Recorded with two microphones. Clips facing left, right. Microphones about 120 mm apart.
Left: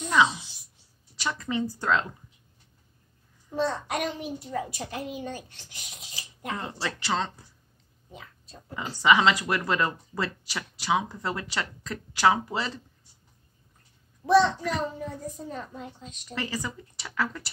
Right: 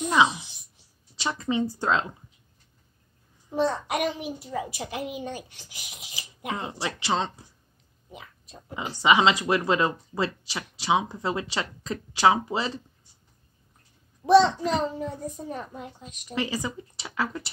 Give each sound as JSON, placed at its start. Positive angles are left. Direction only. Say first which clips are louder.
{"t": 0.0, "sound": "speech", "louder": "right 1 dB", "side_deg": -15}
{"t": 3.4, "sound": "a child's voice", "louder": "right 3 dB", "side_deg": -15}
{"t": 14.2, "sound": "speech", "louder": "right 3 dB", "side_deg": -20}